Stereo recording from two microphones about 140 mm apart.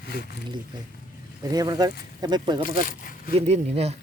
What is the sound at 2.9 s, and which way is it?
Speech, 85° left.